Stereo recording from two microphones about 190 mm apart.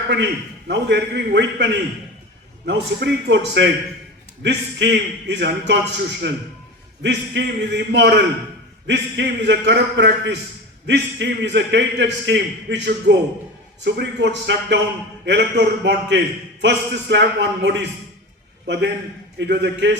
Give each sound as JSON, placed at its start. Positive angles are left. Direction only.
{"t": 0.1, "sound": "a man's voice", "side_deg": -65}